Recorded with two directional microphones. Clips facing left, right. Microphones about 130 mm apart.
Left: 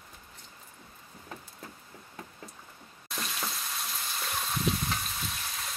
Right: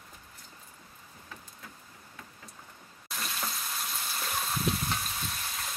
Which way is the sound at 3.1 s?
Centre (ahead or behind).